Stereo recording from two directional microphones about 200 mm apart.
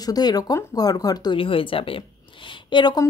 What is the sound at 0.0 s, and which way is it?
Speech, 20° left (ahead or behind).